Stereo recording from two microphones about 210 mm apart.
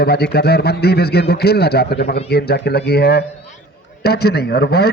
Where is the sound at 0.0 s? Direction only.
50° left (ahead or behind).